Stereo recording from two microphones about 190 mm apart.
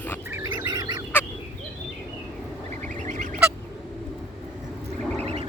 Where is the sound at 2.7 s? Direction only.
40° right (ahead or behind).